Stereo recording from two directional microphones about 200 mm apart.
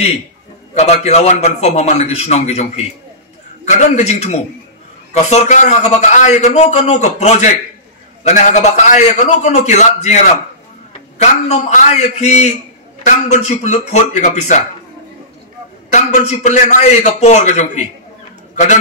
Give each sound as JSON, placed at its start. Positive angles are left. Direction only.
{"t": 0.7, "sound": "a man's voice", "side_deg": 35}
{"t": 15.9, "sound": "a man's voice", "side_deg": 35}